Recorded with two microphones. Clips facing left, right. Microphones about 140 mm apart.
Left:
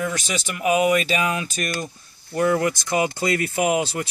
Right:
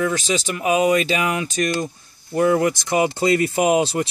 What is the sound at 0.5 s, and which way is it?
Speech, 30° right (ahead or behind).